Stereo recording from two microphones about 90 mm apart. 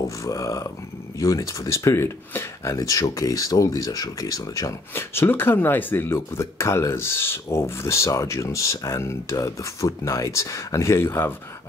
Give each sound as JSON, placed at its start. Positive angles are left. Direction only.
{"t": 0.2, "sound": "speech", "side_deg": 40}